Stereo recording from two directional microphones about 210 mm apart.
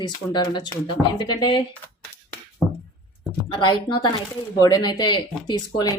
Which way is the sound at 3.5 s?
20° left (ahead or behind).